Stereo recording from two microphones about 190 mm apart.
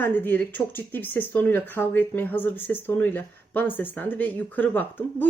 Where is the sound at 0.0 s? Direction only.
10° left (ahead or behind).